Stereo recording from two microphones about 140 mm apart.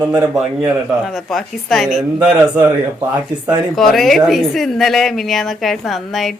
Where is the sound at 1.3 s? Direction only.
Centre (ahead or behind).